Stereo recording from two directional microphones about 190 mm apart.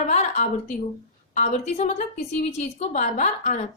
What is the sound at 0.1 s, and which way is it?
A woman's voice, 40° left (ahead or behind).